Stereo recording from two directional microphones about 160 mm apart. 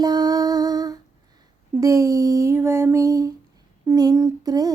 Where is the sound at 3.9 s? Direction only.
20° right (ahead or behind).